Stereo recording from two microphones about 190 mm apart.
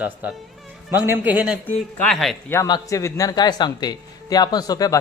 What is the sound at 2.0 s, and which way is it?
Speech, centre (ahead or behind).